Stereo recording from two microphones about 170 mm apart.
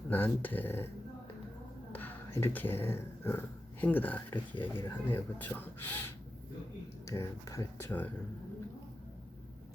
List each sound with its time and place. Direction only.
0.1 s speech: 10° left (ahead or behind)
1.9 s speech: 10° left (ahead or behind)
7.1 s speech: 20° left (ahead or behind)